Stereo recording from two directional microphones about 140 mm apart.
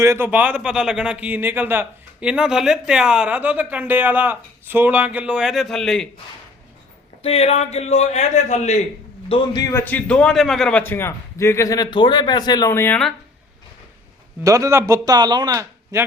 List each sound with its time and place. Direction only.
0.0 s a man's voice: 15° right (ahead or behind); by 6.1 s 5° left (ahead or behind)
7.2 s a man's voice: 45° left (ahead or behind)
9.3 s a man's voice: 30° left (ahead or behind)
9.8 s a man's voice: 10° left (ahead or behind)
14.4 s speech: 25° right (ahead or behind)